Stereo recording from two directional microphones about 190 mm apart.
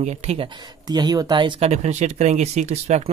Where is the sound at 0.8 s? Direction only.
20° right (ahead or behind).